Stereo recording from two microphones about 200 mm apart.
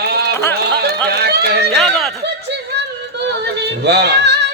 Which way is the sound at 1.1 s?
55° right (ahead or behind).